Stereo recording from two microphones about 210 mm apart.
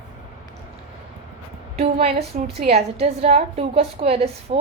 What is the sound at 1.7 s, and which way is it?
A woman's voice, 30° right (ahead or behind).